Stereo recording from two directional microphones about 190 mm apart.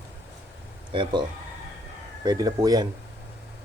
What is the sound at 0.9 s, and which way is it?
Speech, 25° right (ahead or behind).